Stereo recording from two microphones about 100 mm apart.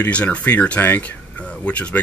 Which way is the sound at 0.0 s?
15° left (ahead or behind).